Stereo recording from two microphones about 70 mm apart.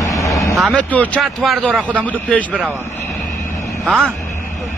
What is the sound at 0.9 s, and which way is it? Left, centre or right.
Speech, left.